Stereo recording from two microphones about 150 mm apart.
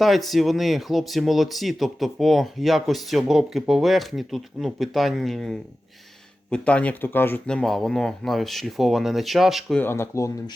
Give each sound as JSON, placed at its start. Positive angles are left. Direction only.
{"t": 0.0, "sound": "speech", "side_deg": 0}
{"t": 9.8, "sound": "speech", "side_deg": 15}